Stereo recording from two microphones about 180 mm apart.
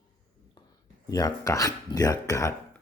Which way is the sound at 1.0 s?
20° left (ahead or behind).